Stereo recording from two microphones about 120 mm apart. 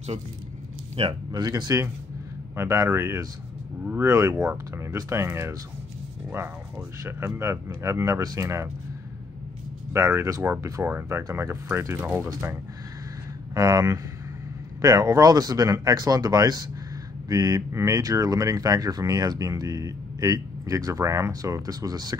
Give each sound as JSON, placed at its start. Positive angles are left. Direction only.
{"t": 1.0, "sound": "speech", "side_deg": -60}
{"t": 1.3, "sound": "speech", "side_deg": -30}
{"t": 7.0, "sound": "speech", "side_deg": -20}
{"t": 9.9, "sound": "speech", "side_deg": -25}
{"t": 13.6, "sound": "speech", "side_deg": -30}